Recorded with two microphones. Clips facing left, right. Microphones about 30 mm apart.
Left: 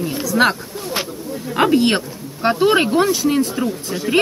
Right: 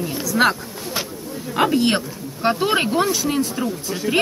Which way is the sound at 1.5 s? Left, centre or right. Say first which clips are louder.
Left 3 dB; centre.